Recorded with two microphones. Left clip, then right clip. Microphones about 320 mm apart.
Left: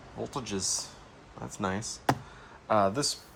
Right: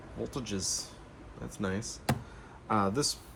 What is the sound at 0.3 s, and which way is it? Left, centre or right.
Speech, centre.